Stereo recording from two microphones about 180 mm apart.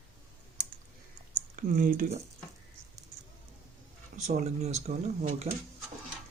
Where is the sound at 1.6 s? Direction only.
50° right (ahead or behind).